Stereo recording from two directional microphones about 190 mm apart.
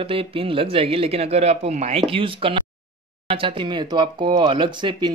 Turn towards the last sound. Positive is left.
turn(degrees=-25)  # may be behind; listen again after turning